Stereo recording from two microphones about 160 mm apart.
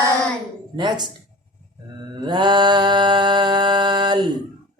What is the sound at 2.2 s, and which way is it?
Mantra, 30° right (ahead or behind).